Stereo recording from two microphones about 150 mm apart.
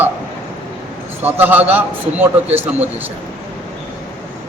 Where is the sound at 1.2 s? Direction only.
10° right (ahead or behind).